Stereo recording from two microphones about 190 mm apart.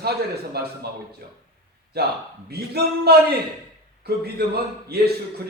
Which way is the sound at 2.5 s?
55° right (ahead or behind).